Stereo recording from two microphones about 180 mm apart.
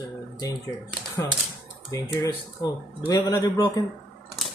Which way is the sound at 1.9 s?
15° left (ahead or behind).